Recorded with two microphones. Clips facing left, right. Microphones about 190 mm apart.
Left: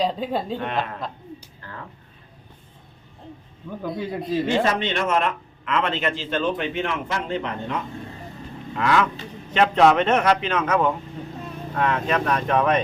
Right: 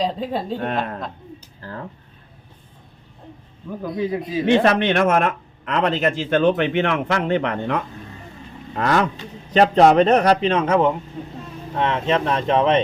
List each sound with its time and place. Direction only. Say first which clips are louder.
0.0 s a man's voice: right 1 dB; centre (ahead or behind)
3.7 s a man's voice: right 4 dB; centre (ahead or behind)
4.4 s speech: right 9 dB; 65° right (ahead or behind); by 6.1 s 40° right (ahead or behind)
6.3 s a man's voice: right 8 dB; 60° right (ahead or behind)
8.7 s a man's voice: right 2 dB; 40° right (ahead or behind); by 12.8 s 25° right (ahead or behind)